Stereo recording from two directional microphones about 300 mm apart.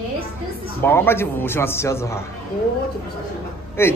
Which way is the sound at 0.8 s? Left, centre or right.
Centre.